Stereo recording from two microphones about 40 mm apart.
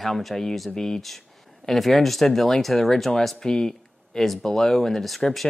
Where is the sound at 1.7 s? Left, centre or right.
Centre.